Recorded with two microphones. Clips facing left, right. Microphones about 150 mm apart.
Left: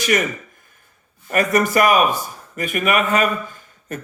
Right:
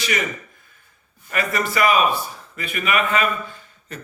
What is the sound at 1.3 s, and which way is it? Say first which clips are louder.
A man's voice: left 6 dB; 45° left (ahead or behind).